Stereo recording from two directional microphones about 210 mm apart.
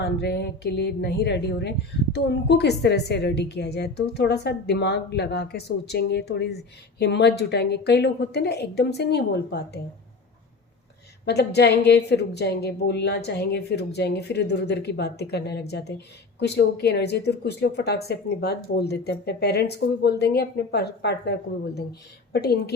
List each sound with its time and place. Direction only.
0.0 s a woman's voice: 50° left (ahead or behind)
11.3 s a woman's voice: 50° left (ahead or behind)